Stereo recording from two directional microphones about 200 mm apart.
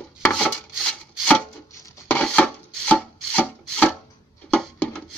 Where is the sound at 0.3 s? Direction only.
5° left (ahead or behind).